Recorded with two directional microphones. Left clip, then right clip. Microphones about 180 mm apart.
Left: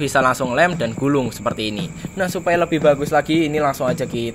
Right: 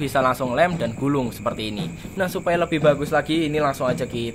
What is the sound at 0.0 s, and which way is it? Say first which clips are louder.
Speech: left 4 dB; 25° left (ahead or behind).